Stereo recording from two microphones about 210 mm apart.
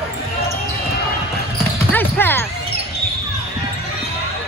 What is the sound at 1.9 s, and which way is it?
Basketball bounce, 10° left (ahead or behind).